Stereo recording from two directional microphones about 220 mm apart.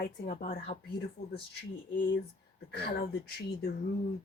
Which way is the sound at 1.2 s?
45° left (ahead or behind).